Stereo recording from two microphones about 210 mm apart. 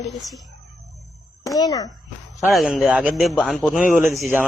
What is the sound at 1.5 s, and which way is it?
Speech, 15° left (ahead or behind).